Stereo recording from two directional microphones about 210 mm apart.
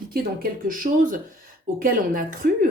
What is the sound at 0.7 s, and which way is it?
Speech, 40° right (ahead or behind).